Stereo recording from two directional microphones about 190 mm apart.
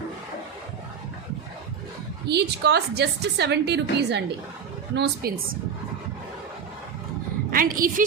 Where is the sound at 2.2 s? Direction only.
60° right (ahead or behind).